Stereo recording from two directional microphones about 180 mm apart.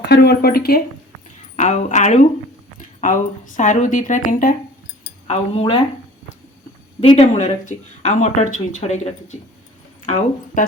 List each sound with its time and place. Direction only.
0.0 s speech: 65° left (ahead or behind)
1.5 s a woman's voice: 40° left (ahead or behind)
5.3 s speech: 35° left (ahead or behind)
7.0 s a woman's voice: 35° left (ahead or behind)